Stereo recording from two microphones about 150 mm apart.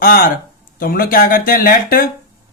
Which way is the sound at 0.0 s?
75° left (ahead or behind).